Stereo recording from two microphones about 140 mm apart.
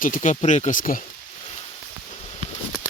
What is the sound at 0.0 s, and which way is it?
Speech, 65° left (ahead or behind).